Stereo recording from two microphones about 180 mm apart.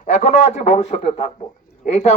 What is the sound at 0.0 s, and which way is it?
Speech, 40° left (ahead or behind).